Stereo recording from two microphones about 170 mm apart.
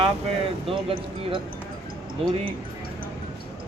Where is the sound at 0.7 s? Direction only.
30° right (ahead or behind).